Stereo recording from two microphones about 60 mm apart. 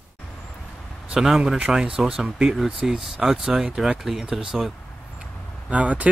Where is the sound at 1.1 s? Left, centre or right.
Centre.